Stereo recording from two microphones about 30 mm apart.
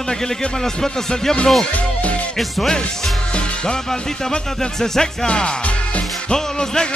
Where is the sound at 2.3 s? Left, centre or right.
Centre.